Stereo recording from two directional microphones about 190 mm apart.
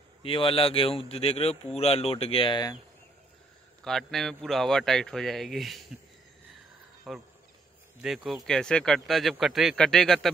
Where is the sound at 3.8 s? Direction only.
Centre (ahead or behind).